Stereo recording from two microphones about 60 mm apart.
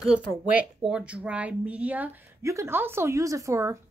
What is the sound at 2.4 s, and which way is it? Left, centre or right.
Speech, right.